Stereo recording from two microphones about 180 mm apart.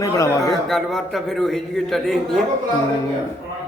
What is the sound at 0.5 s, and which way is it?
A man's voice, centre (ahead or behind).